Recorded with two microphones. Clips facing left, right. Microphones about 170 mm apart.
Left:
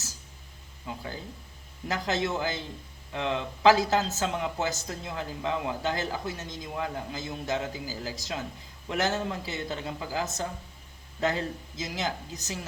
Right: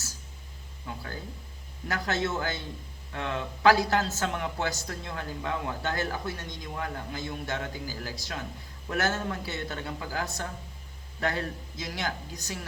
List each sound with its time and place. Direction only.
0.9 s a man's voice: 20° left (ahead or behind)
11.8 s speech: 20° left (ahead or behind)